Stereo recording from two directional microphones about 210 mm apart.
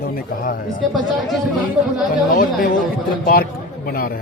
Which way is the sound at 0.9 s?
Centre (ahead or behind).